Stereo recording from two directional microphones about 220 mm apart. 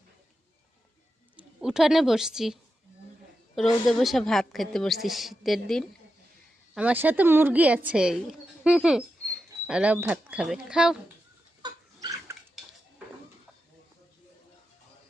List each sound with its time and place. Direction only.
1.4 s a woman's voice: 5° right (ahead or behind)
11.6 s pig: 15° right (ahead or behind)